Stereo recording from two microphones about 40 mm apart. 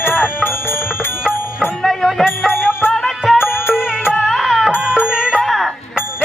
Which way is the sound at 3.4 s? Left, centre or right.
Left.